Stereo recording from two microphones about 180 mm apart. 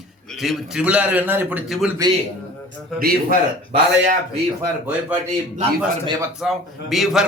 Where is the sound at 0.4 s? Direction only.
5° right (ahead or behind).